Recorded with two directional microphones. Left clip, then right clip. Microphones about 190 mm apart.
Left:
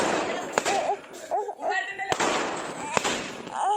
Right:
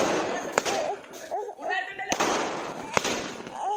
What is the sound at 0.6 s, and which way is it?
Whip, 40° left (ahead or behind).